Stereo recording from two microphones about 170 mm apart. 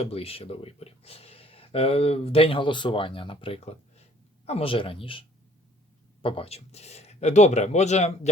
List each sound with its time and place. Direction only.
0.0 s speech: 35° left (ahead or behind)
6.2 s speech: 35° left (ahead or behind)